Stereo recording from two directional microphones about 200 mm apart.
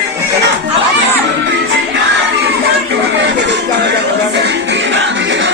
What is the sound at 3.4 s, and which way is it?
Music, 60° right (ahead or behind).